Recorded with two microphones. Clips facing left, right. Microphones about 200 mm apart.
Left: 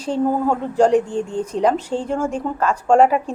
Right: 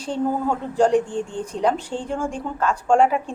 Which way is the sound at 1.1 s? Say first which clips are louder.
Left 4 dB; 40° left (ahead or behind).